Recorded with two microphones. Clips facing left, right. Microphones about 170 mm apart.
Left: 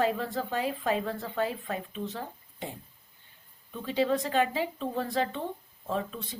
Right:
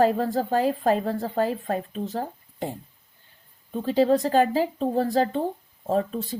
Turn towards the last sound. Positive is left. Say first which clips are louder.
# right 8 dB
turn(degrees=-40)  # may be behind; listen again after turning